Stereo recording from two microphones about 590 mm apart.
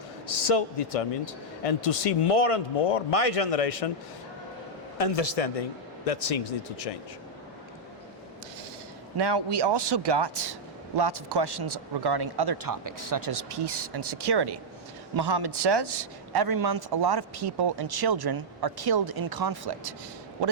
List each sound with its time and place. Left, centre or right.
0.3 s speech: left
4.9 s speech: left
9.1 s speech: right